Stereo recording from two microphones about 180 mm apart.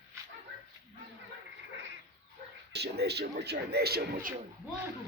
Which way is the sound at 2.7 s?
65° right (ahead or behind).